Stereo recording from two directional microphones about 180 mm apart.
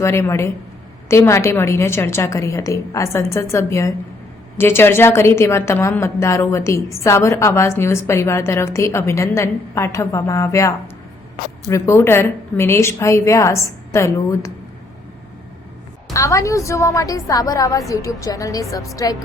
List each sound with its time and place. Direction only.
0.0 s a woman's voice: 15° left (ahead or behind)
16.1 s a woman's voice: 15° left (ahead or behind)